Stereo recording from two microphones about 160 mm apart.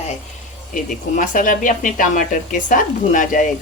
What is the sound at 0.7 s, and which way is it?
A woman's voice, 55° left (ahead or behind).